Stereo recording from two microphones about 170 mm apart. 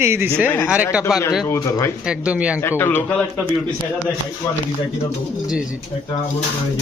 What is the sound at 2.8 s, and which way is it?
Speech, 10° left (ahead or behind).